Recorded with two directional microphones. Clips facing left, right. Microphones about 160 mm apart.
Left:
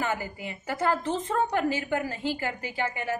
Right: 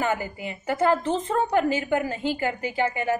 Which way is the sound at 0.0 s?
20° right (ahead or behind).